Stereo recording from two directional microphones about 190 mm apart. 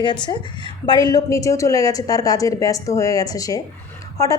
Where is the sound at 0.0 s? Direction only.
25° left (ahead or behind).